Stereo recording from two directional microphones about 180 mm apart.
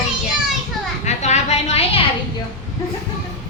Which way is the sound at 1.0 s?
40° left (ahead or behind).